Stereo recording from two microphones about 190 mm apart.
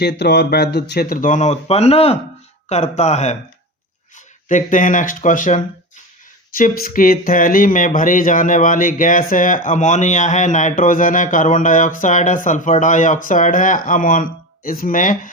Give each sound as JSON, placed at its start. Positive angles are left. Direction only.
{"t": 0.0, "sound": "speech", "side_deg": 60}
{"t": 4.4, "sound": "speech", "side_deg": 40}